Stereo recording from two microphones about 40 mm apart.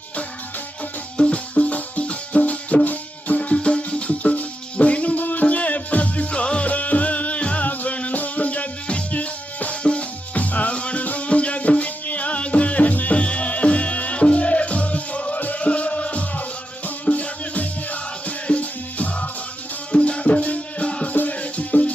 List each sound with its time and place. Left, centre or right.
1.1 s music: left
3.5 s music: left
13.1 s music: left